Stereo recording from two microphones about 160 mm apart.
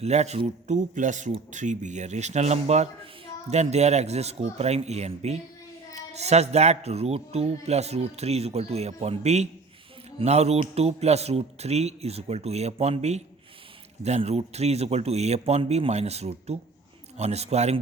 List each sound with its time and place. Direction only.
0.0 s speech: 45° right (ahead or behind)